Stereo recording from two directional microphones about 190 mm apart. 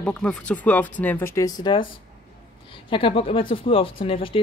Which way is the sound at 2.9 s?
25° left (ahead or behind).